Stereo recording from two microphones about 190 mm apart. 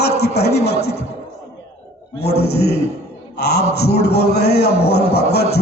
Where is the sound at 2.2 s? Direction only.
60° left (ahead or behind).